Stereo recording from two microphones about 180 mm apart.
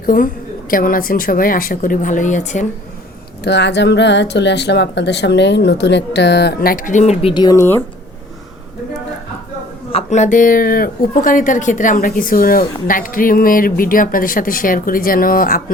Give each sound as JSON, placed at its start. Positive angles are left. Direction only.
{"t": 0.0, "sound": "a woman's voice", "side_deg": 50}
{"t": 3.4, "sound": "speech", "side_deg": 70}
{"t": 9.9, "sound": "speech", "side_deg": 40}